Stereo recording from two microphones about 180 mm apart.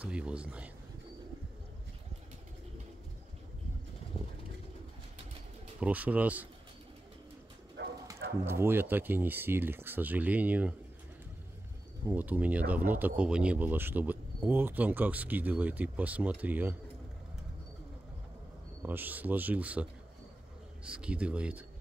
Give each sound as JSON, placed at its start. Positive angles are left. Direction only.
{"t": 0.0, "sound": "speech", "side_deg": -5}
{"t": 5.8, "sound": "speech", "side_deg": -10}
{"t": 7.8, "sound": "bow-wow", "side_deg": -80}
{"t": 8.5, "sound": "speech", "side_deg": -15}
{"t": 12.1, "sound": "speech", "side_deg": -10}
{"t": 18.8, "sound": "speech", "side_deg": -10}